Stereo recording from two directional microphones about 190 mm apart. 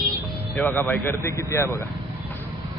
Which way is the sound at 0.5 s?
10° left (ahead or behind).